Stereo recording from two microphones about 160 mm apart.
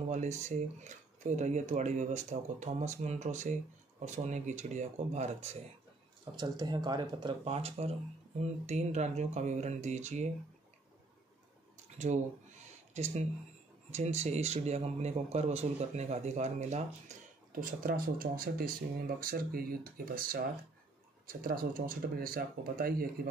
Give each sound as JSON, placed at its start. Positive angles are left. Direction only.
{"t": 0.1, "sound": "a man's voice", "side_deg": -50}
{"t": 6.3, "sound": "a man's voice", "side_deg": -25}
{"t": 11.7, "sound": "a sound", "side_deg": -45}
{"t": 12.9, "sound": "a man's voice", "side_deg": -45}